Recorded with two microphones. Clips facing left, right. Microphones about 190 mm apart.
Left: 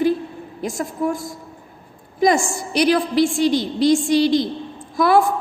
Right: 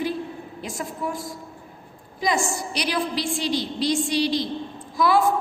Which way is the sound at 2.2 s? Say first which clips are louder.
Left 7 dB; 50° left (ahead or behind).